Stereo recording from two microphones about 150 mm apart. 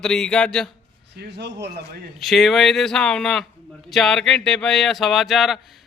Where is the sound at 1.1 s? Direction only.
90° right.